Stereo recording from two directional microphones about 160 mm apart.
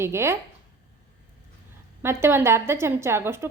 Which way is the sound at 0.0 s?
15° right (ahead or behind).